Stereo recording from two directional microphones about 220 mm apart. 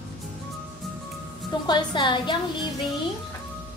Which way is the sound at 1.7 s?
20° left (ahead or behind).